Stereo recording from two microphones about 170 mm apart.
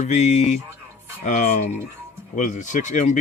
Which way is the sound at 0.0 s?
45° left (ahead or behind).